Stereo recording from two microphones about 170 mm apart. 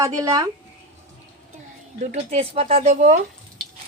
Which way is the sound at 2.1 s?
35° right (ahead or behind).